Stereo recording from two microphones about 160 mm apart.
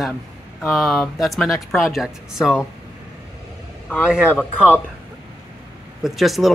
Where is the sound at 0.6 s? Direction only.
Centre (ahead or behind).